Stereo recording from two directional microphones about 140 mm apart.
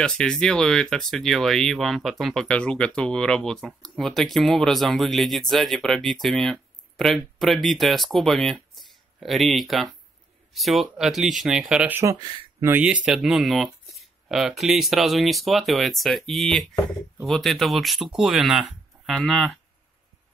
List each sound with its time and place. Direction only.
0.0 s speech: 5° left (ahead or behind)
12.0 s speech: 25° right (ahead or behind)
12.6 s speech: 10° right (ahead or behind)